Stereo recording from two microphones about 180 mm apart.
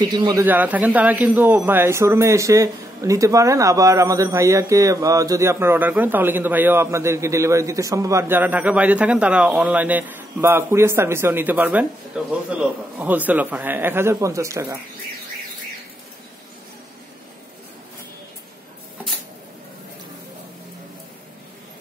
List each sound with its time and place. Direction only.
0.0 s a man's voice: 20° right (ahead or behind)
0.5 s speech: 10° right (ahead or behind)